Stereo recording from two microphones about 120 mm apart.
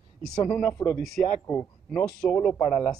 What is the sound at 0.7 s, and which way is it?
Speech, 20° left (ahead or behind).